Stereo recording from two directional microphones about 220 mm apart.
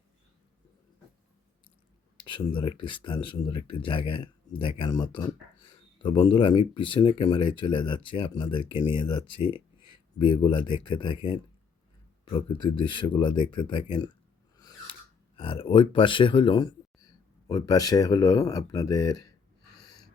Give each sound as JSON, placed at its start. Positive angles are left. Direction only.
{"t": 2.1, "sound": "speech", "side_deg": 20}
{"t": 15.4, "sound": "speech", "side_deg": 25}